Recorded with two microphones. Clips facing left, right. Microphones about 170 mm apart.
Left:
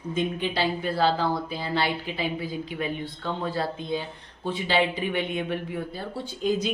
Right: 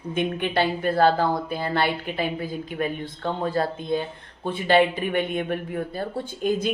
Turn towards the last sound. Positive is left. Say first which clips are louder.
# right 2 dB
turn(degrees=-55)  # may be behind; listen again after turning